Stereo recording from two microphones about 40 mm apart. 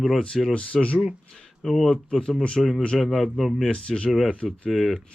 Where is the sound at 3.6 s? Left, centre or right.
Centre.